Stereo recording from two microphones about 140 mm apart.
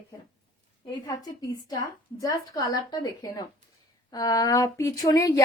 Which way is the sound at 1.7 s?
25° left (ahead or behind).